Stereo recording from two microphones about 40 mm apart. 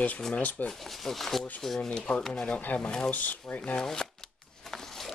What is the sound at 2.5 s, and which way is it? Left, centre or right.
Speech, left.